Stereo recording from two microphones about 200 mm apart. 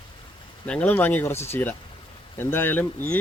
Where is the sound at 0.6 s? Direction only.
5° left (ahead or behind).